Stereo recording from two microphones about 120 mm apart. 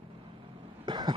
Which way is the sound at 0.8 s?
40° right (ahead or behind).